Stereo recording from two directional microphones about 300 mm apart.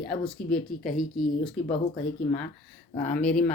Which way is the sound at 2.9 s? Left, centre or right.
Left.